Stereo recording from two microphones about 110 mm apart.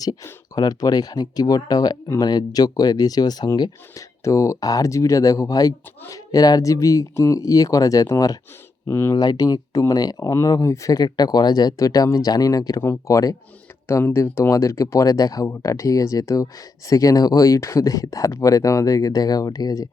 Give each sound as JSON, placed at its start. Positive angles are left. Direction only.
{"t": 0.5, "sound": "speech", "side_deg": 35}
{"t": 9.1, "sound": "speech", "side_deg": 40}